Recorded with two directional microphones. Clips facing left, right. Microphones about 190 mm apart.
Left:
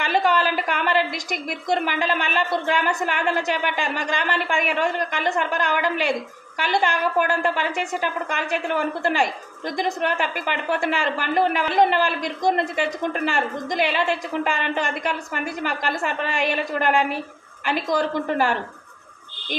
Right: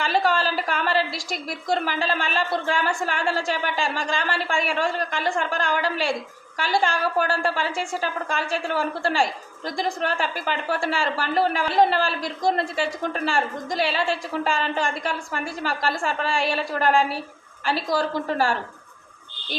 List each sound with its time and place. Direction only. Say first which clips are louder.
0.0 s a woman's voice: left 1 dB; 15° left (ahead or behind)